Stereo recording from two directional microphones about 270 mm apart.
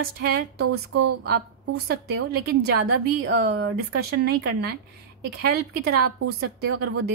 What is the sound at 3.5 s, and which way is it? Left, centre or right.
Speech, right.